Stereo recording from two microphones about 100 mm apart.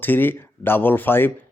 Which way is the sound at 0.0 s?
20° left (ahead or behind).